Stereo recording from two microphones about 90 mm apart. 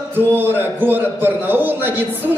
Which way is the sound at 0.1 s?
25° right (ahead or behind).